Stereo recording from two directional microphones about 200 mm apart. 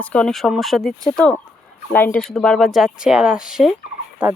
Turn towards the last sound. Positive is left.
turn(degrees=-5)  # may be behind; listen again after turning